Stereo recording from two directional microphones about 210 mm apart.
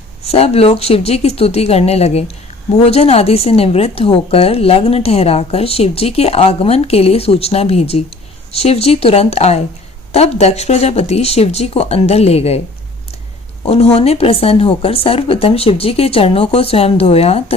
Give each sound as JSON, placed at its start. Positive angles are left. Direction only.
{"t": 0.3, "sound": "a woman's voice", "side_deg": 30}
{"t": 13.7, "sound": "a woman's voice", "side_deg": 30}